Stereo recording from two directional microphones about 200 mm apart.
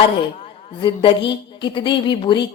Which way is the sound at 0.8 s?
25° left (ahead or behind).